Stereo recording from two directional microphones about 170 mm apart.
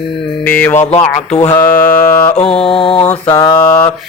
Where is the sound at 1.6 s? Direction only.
15° left (ahead or behind).